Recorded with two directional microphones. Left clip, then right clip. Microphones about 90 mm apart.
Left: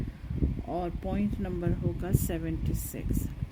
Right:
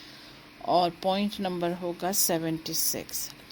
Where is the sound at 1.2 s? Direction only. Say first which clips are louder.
Right 5 dB; 15° left (ahead or behind).